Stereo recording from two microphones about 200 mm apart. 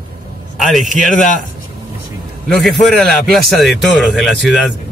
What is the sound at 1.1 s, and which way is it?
Speech, 40° left (ahead or behind).